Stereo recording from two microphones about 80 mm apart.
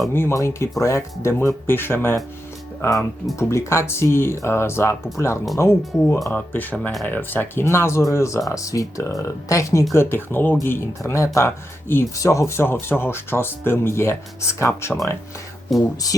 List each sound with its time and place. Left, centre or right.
0.1 s speech: left
3.3 s speech: left
9.9 s speech: left
15.7 s speech: centre